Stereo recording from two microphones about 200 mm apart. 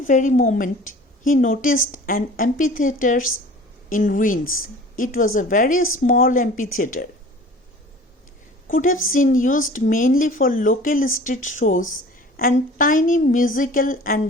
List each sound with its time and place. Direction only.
0.1 s a woman's voice: 40° left (ahead or behind)
4.4 s a woman's voice: 90° left
4.9 s speech: 45° left (ahead or behind)
8.6 s a woman's voice: 45° left (ahead or behind)